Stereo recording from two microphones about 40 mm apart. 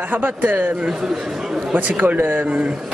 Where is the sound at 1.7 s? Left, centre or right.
Right.